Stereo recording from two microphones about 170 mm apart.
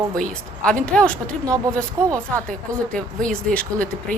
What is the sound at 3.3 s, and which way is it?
Speech, 5° left (ahead or behind).